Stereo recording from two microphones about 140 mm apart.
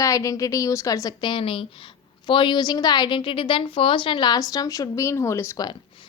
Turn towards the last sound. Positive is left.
turn(degrees=30)  # may be behind; listen again after turning